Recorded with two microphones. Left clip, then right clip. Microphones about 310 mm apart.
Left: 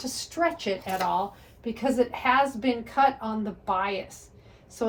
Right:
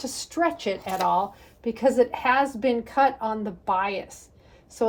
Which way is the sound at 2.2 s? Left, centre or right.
Right.